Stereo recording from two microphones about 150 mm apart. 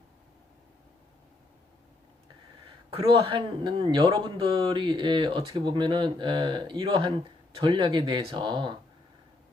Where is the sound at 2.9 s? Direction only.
35° right (ahead or behind).